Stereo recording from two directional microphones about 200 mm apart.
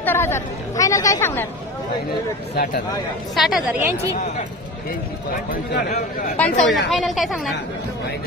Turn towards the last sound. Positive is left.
turn(degrees=0)  # may be behind; listen again after turning